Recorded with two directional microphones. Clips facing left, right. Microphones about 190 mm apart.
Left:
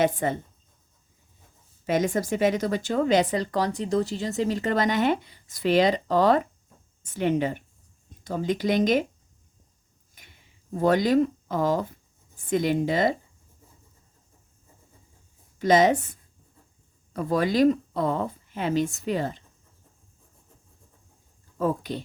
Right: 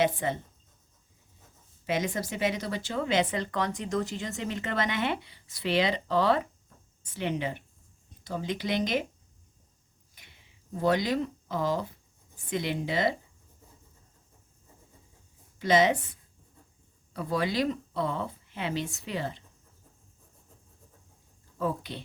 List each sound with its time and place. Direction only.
0.0 s speech: 45° left (ahead or behind)
1.9 s speech: 45° left (ahead or behind)
10.8 s speech: 50° left (ahead or behind)
15.5 s speech: 45° left (ahead or behind)
17.2 s speech: 45° left (ahead or behind)
21.6 s speech: 45° left (ahead or behind)